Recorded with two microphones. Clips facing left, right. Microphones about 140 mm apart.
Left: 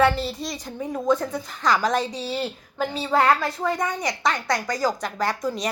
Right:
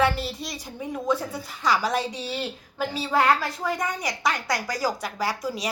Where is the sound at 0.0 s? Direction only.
5° right (ahead or behind).